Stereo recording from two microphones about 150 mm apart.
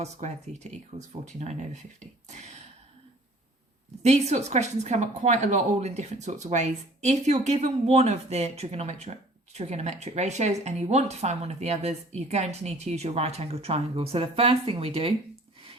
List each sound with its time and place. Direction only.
0.0 s speech: 50° right (ahead or behind)
4.0 s speech: 50° right (ahead or behind)